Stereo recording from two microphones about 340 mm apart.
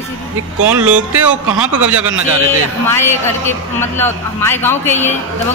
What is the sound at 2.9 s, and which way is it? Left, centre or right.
A man's voice, centre.